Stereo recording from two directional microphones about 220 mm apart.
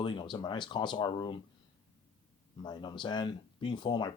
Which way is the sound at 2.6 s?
20° left (ahead or behind).